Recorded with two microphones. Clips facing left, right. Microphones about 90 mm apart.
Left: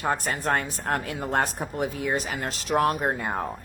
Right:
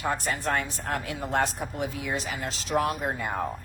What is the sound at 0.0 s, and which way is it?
Speech, 45° left (ahead or behind).